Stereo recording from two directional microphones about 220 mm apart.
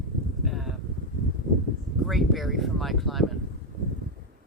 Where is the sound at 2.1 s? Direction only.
Centre (ahead or behind).